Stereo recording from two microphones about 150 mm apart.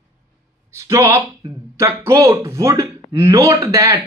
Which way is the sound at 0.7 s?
20° right (ahead or behind).